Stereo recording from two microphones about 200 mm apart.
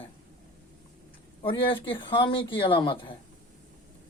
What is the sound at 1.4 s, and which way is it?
Speech, 25° left (ahead or behind).